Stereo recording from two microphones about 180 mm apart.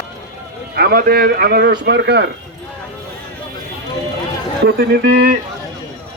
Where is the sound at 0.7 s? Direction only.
60° right (ahead or behind).